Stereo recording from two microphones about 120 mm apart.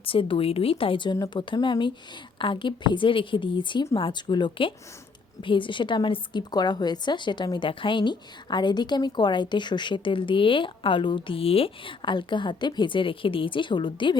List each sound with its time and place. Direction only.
0.0 s a woman's voice: 50° left (ahead or behind)